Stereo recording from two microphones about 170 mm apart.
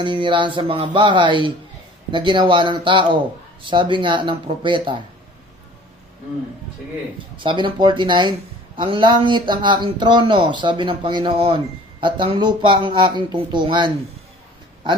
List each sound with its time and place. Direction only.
0.0 s speech: 30° right (ahead or behind)
7.3 s speech: 30° right (ahead or behind)